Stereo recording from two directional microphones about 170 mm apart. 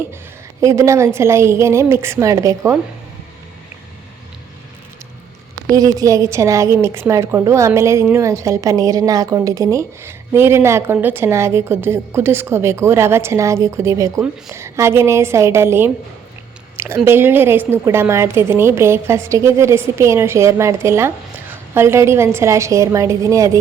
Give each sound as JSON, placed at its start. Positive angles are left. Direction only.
{"t": 0.6, "sound": "a woman's voice", "side_deg": -20}
{"t": 5.6, "sound": "a woman's voice", "side_deg": -20}
{"t": 16.7, "sound": "a sound", "side_deg": -15}
{"t": 17.0, "sound": "a woman's voice", "side_deg": -15}